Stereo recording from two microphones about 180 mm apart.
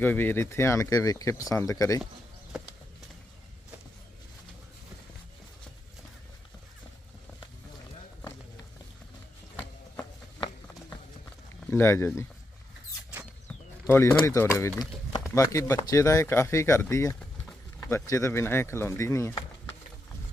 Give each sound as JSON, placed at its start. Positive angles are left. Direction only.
{"t": 0.0, "sound": "speech", "side_deg": 10}
{"t": 11.7, "sound": "speech", "side_deg": 15}
{"t": 13.8, "sound": "speech", "side_deg": 15}